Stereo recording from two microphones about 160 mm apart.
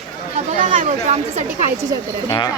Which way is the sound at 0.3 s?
50° right (ahead or behind).